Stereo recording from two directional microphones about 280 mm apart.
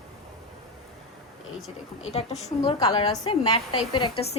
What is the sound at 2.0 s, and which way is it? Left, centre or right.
A woman's voice, left.